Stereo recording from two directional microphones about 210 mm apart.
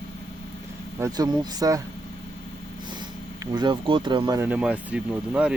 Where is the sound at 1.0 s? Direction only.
15° right (ahead or behind).